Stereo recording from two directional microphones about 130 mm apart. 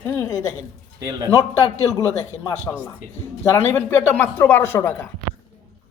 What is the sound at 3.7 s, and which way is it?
Speech, 15° left (ahead or behind).